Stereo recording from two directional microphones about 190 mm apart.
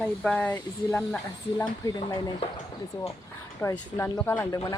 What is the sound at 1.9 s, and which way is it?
Speech, 25° left (ahead or behind).